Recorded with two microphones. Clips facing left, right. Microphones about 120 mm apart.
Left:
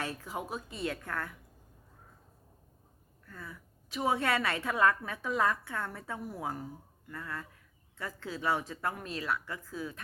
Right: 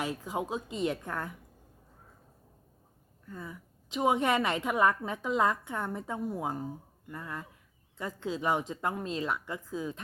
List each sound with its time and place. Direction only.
0.0 s a woman's voice: 15° right (ahead or behind)
3.2 s a woman's voice: 20° right (ahead or behind)